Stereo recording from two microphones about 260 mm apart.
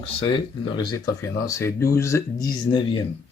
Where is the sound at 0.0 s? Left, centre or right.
Left.